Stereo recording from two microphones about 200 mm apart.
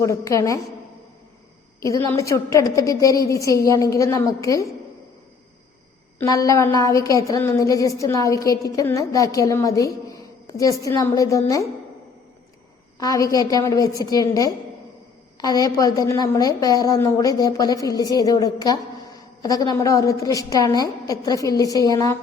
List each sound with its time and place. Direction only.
0.0 s a woman's voice: 15° left (ahead or behind)
2.1 s a woman's voice: 15° left (ahead or behind)
6.1 s a woman's voice: 15° left (ahead or behind)
13.0 s a woman's voice: 15° left (ahead or behind)